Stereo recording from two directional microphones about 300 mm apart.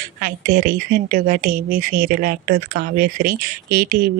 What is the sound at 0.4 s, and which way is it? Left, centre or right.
Speech, right.